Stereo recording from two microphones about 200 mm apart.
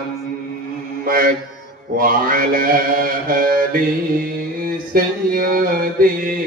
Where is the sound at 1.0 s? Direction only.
45° right (ahead or behind).